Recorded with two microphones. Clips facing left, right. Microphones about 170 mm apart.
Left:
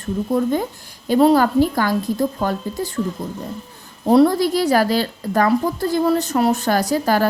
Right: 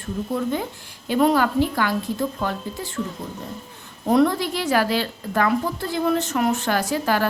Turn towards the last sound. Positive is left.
turn(degrees=40)  # may be behind; listen again after turning